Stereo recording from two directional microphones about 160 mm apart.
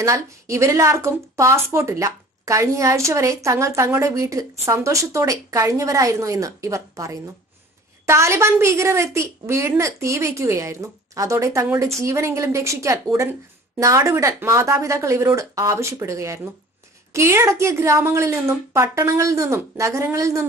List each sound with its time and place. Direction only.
0.0 s a woman's voice: 20° right (ahead or behind)